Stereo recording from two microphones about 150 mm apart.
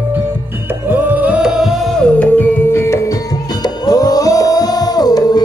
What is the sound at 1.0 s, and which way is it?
Music, 10° right (ahead or behind).